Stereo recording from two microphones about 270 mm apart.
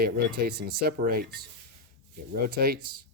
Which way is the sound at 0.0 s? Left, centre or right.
Right.